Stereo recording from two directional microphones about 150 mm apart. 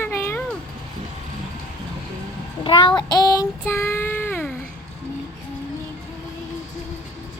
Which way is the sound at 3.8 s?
15° left (ahead or behind).